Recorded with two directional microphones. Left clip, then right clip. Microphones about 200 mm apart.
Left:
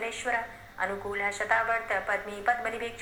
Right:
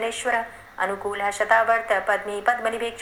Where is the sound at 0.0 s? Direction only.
40° right (ahead or behind).